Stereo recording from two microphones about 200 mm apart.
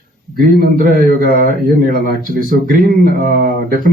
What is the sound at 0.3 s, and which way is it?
Speech, 50° right (ahead or behind).